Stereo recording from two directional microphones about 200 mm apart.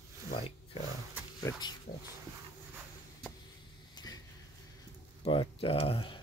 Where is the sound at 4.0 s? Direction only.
20° left (ahead or behind).